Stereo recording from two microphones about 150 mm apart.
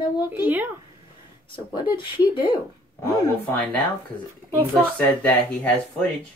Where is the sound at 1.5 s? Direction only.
35° left (ahead or behind).